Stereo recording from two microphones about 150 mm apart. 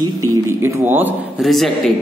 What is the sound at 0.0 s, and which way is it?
Speech, 20° right (ahead or behind).